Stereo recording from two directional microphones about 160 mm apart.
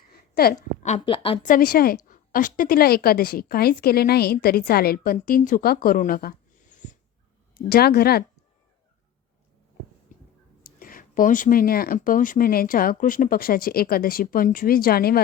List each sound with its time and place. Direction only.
0.1 s a sound: 70° left (ahead or behind)
0.8 s a woman's voice: 45° left (ahead or behind)
1.5 s a woman's voice: 65° left (ahead or behind)
2.0 s a woman's voice: 60° left (ahead or behind)
5.1 s speech: 55° left (ahead or behind)
7.7 s a woman's voice: 75° left (ahead or behind)
10.1 s a sound: 55° left (ahead or behind)
10.6 s speech: 60° left (ahead or behind)